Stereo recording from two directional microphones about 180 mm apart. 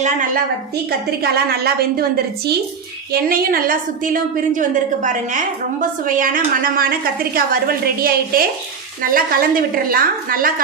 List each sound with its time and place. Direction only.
0.9 s a woman's voice: 60° right (ahead or behind)